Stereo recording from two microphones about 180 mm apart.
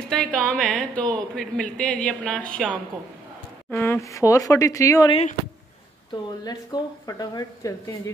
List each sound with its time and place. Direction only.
0.1 s a woman's voice: 5° left (ahead or behind)
6.4 s a woman's voice: 20° left (ahead or behind)